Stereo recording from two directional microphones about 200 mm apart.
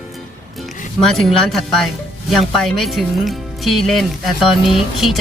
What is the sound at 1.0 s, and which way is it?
Speech, centre (ahead or behind).